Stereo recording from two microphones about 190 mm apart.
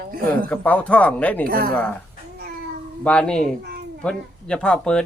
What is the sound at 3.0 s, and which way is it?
Speech, 5° left (ahead or behind).